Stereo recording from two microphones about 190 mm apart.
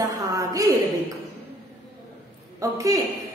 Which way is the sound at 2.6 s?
15° right (ahead or behind).